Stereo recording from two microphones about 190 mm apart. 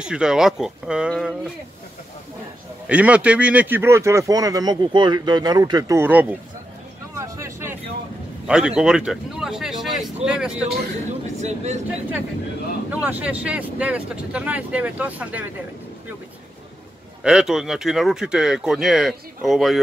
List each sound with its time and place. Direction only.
0.0 s speech: 5° right (ahead or behind)
2.9 s speech: 5° right (ahead or behind)
7.2 s vehicle: 15° right (ahead or behind)
8.5 s speech: 5° right (ahead or behind)
11.4 s speech: 35° right (ahead or behind)
12.9 s speech: 10° right (ahead or behind)
17.2 s speech: 5° right (ahead or behind)